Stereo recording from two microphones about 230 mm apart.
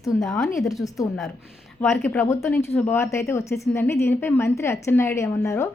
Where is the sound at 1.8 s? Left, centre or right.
Centre.